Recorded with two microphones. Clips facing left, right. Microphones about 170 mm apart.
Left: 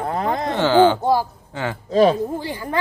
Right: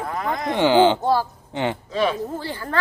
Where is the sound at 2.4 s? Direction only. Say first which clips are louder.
Left 2 dB; 15° left (ahead or behind).